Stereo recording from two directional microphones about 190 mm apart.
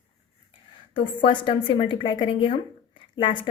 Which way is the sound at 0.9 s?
25° left (ahead or behind).